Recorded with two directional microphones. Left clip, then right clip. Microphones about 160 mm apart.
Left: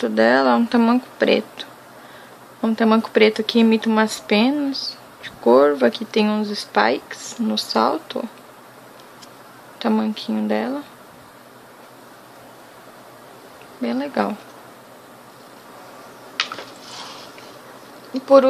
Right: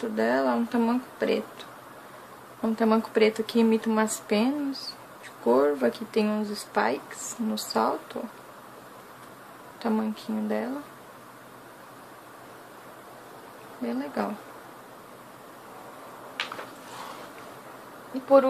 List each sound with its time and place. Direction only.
0.0 s speech: 40° left (ahead or behind)
9.8 s speech: 30° left (ahead or behind)
13.8 s speech: 30° left (ahead or behind)